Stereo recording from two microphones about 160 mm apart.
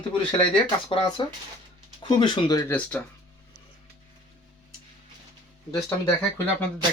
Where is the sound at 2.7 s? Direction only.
10° left (ahead or behind).